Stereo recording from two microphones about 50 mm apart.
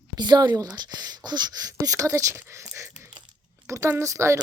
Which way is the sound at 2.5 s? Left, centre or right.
Right.